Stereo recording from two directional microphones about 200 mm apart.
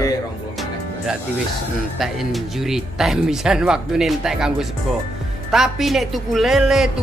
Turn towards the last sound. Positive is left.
turn(degrees=0)  # may be behind; listen again after turning